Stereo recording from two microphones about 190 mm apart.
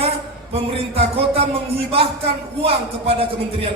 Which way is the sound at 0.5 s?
30° right (ahead or behind).